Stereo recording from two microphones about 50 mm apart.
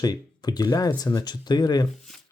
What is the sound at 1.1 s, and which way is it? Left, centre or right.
Speech, left.